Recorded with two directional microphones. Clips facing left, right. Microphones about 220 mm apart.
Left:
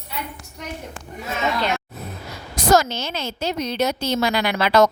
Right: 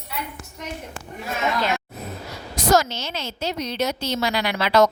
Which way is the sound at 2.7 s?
50° left (ahead or behind).